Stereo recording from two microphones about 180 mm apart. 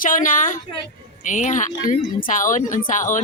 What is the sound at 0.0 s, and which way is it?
Speech, 50° left (ahead or behind).